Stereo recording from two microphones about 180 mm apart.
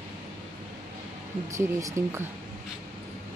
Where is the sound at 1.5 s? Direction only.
15° right (ahead or behind).